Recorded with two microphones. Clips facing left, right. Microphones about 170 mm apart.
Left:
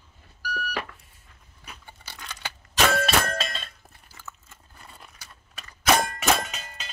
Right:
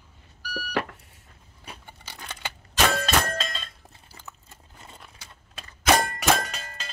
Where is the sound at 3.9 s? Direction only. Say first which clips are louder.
Left 1 dB; 20° right (ahead or behind).